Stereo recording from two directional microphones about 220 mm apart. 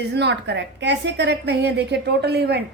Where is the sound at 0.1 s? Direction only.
50° right (ahead or behind).